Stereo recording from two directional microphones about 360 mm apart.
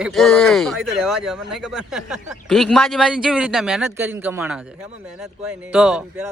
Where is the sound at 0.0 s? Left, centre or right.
Centre.